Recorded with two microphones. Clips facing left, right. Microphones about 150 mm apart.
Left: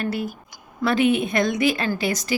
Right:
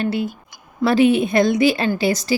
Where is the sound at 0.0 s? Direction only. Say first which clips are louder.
Right 4 dB; 25° right (ahead or behind).